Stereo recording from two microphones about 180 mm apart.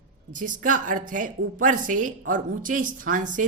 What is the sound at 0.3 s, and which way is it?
A woman's voice, 45° right (ahead or behind).